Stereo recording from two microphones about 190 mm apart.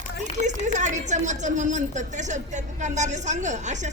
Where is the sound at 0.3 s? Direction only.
40° right (ahead or behind).